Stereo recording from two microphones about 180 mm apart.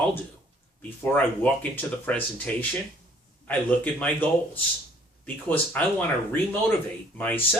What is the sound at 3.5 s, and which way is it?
Speech, 10° left (ahead or behind).